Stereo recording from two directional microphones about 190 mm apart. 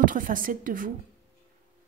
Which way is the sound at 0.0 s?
45° right (ahead or behind).